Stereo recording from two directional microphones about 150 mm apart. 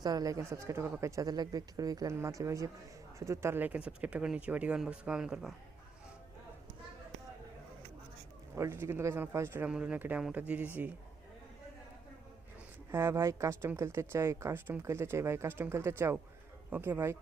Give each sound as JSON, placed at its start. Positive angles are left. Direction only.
{"t": 0.0, "sound": "speech", "side_deg": -25}
{"t": 8.5, "sound": "speech", "side_deg": -20}
{"t": 12.9, "sound": "speech", "side_deg": -15}